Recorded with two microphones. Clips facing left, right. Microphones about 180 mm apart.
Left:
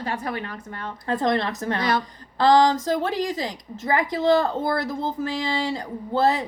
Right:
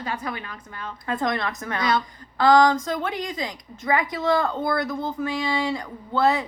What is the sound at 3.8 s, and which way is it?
Speech, 25° left (ahead or behind).